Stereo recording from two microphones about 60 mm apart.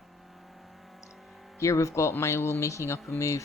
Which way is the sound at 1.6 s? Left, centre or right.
Left.